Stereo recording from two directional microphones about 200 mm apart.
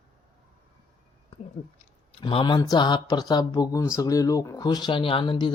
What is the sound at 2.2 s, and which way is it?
Speech, 25° left (ahead or behind).